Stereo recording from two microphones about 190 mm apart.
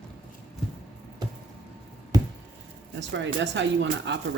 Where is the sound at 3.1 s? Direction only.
70° right (ahead or behind).